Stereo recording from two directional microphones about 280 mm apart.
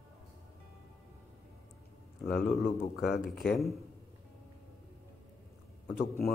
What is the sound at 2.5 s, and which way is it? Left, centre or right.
Speech, centre.